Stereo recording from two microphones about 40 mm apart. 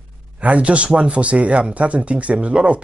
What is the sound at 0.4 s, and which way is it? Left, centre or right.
Speech, right.